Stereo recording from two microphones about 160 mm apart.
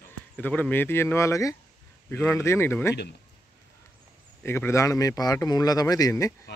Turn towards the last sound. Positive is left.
turn(degrees=20)  # may be behind; listen again after turning